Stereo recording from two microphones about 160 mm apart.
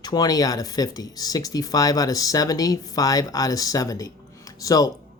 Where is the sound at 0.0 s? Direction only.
25° left (ahead or behind).